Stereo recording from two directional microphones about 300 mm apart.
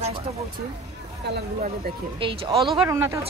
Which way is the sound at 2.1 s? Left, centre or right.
Centre.